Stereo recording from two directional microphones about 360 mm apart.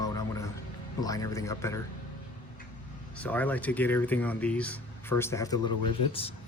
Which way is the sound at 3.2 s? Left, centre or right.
Centre.